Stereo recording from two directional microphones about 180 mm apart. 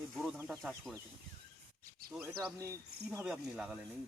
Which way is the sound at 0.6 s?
5° left (ahead or behind).